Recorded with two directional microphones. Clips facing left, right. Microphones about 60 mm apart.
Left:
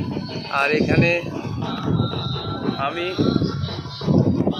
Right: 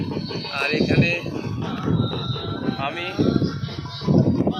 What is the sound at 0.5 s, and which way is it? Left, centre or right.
Speech, left.